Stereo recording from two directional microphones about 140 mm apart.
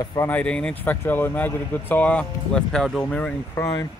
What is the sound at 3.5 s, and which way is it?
Speech, 25° left (ahead or behind).